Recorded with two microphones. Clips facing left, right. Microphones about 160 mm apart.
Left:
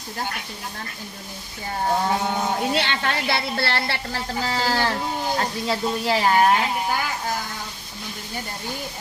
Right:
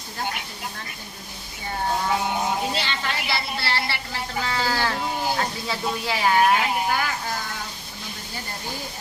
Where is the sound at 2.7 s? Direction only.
60° left (ahead or behind).